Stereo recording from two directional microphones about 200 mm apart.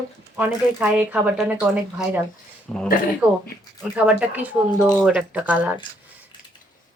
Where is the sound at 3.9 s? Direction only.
10° right (ahead or behind).